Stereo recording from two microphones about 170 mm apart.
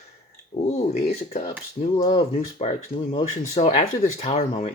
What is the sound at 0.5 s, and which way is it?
Speech, 40° left (ahead or behind).